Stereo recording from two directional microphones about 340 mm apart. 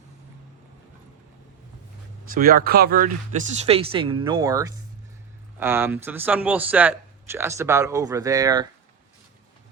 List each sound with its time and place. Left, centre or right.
2.3 s a man's voice: right